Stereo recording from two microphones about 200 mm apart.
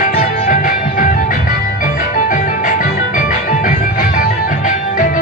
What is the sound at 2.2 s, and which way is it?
Music, 40° left (ahead or behind).